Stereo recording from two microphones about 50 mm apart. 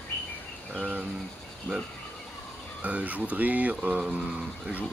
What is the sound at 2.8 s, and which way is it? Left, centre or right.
Speech, right.